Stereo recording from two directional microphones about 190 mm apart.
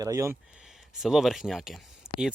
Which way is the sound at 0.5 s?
Centre (ahead or behind).